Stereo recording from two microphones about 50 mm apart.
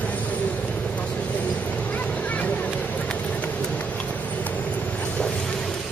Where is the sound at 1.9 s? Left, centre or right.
Left.